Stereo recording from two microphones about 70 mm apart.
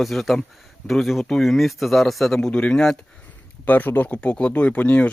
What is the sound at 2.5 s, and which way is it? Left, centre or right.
Speech, centre.